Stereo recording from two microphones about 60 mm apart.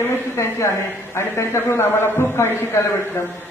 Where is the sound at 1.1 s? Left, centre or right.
Left.